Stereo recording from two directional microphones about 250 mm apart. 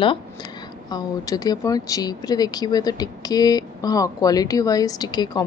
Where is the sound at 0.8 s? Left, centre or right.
Centre.